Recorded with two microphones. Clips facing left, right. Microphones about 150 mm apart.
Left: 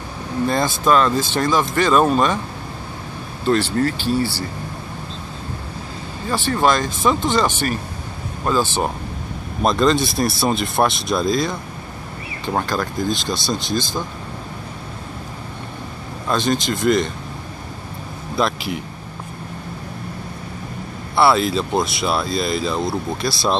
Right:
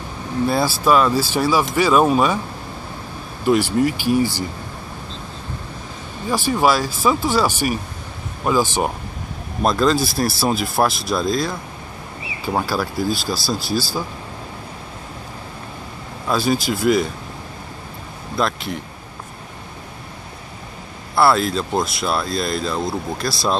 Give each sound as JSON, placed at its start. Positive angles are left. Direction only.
{"t": 0.5, "sound": "speech", "side_deg": -5}
{"t": 3.4, "sound": "speech", "side_deg": -10}
{"t": 6.2, "sound": "speech", "side_deg": -10}
{"t": 9.6, "sound": "speech", "side_deg": 0}
{"t": 16.3, "sound": "speech", "side_deg": -5}
{"t": 18.4, "sound": "speech", "side_deg": 5}
{"t": 21.1, "sound": "speech", "side_deg": 0}